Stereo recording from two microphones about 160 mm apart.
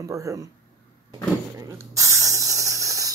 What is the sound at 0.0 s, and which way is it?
Speech, 20° right (ahead or behind).